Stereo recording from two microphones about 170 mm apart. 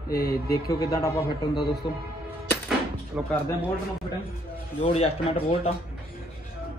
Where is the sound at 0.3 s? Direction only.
20° left (ahead or behind).